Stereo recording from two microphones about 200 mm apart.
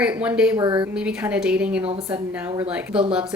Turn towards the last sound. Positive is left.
turn(degrees=-5)  # may be behind; listen again after turning